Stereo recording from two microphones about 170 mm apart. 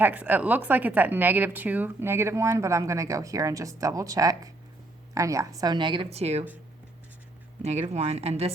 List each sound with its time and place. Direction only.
0.0 s a woman's voice: 10° right (ahead or behind); by 6.4 s 40° right (ahead or behind)
7.6 s speech: 40° right (ahead or behind)